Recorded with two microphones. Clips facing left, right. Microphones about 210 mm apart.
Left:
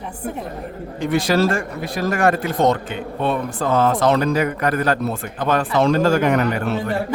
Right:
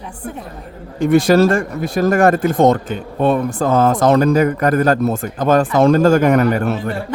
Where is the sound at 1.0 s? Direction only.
45° right (ahead or behind).